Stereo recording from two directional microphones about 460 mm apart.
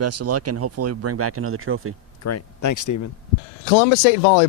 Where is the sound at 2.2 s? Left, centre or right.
Left.